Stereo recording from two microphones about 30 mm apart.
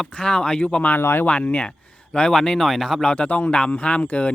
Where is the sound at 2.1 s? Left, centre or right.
Left.